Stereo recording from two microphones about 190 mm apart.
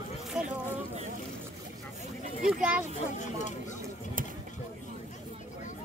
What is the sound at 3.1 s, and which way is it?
Speech, 40° left (ahead or behind).